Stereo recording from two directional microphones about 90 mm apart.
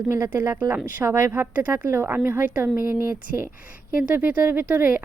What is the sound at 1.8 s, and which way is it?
Speech, 25° right (ahead or behind).